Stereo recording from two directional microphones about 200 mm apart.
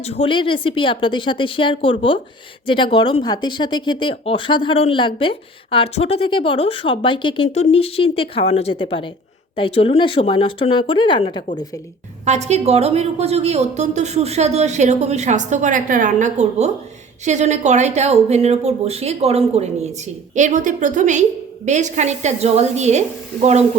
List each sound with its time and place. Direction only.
0.0 s speech: 30° left (ahead or behind)
12.2 s a woman's voice: 35° right (ahead or behind)